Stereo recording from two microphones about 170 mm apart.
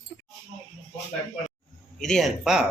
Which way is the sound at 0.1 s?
10° right (ahead or behind).